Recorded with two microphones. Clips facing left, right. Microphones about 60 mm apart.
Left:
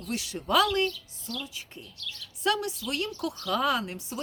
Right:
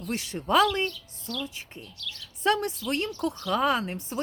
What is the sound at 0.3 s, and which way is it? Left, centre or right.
Speech, right.